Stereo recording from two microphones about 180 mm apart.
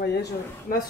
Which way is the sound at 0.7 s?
55° left (ahead or behind).